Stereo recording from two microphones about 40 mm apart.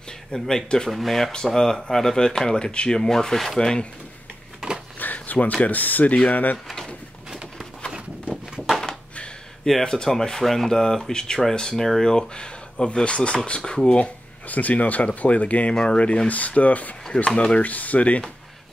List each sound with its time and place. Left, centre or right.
0.3 s speech: centre
0.8 s speech: centre; by 3.0 s left
3.0 s speech: centre
4.9 s a sound: left
5.6 s speech: left
7.9 s a sound: centre
9.8 s speech: centre
13.6 s speech: centre
13.8 s speech: left
14.5 s speech: left
15.7 s speech: left
17.1 s speech: left
17.6 s speech: left